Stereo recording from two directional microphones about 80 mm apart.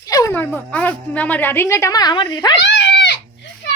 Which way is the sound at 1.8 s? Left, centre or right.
Left.